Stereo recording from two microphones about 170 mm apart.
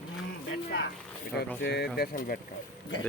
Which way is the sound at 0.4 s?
90° left.